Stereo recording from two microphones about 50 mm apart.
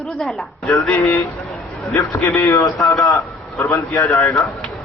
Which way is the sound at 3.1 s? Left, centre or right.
Left.